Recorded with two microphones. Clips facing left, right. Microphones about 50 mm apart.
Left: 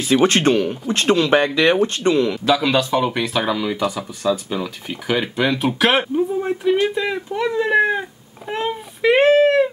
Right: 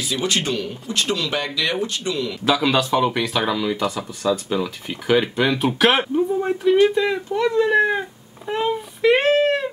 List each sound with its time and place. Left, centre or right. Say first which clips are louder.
0.0 s speech: left 8 dB; left
2.4 s speech: left 1 dB; centre
7.9 s cat: left 1 dB; centre
9.3 s a sound: left 4 dB; centre